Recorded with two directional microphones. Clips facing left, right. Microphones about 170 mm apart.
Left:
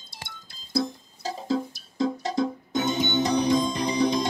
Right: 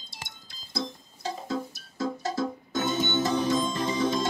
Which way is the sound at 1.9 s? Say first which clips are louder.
Left 4 dB; 20° left (ahead or behind).